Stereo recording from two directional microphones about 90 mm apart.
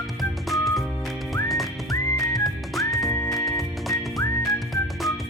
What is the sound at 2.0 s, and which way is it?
Music, 40° left (ahead or behind).